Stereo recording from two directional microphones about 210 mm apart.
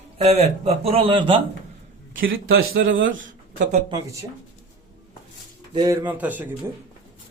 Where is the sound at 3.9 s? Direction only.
15° right (ahead or behind).